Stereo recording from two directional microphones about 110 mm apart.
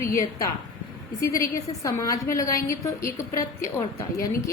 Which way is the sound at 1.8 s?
30° left (ahead or behind).